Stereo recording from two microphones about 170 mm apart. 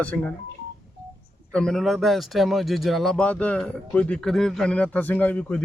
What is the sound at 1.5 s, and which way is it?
Speech, 5° left (ahead or behind).